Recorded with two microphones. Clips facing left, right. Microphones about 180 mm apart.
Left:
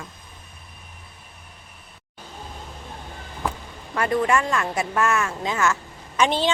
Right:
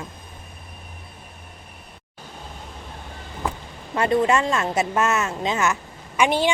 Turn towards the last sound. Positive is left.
turn(degrees=-10)  # may be behind; listen again after turning